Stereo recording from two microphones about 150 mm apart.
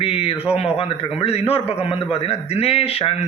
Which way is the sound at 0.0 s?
40° left (ahead or behind).